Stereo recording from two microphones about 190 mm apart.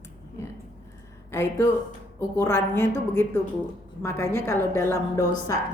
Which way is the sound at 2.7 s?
10° left (ahead or behind).